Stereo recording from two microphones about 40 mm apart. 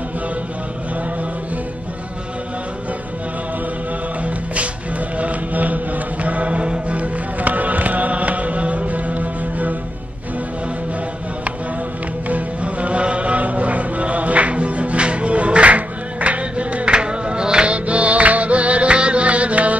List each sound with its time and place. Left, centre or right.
5.1 s music: right
12.3 s music: right